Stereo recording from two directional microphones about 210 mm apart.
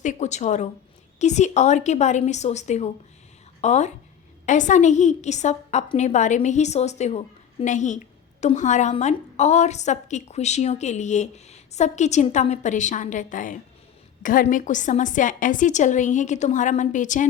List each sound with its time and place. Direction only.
0.0 s a woman's voice: 35° left (ahead or behind)